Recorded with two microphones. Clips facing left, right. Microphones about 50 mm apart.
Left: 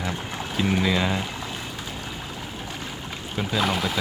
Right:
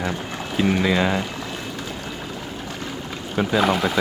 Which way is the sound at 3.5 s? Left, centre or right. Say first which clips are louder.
Right 4 dB; centre.